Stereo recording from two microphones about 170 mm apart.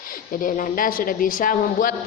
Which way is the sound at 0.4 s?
50° left (ahead or behind).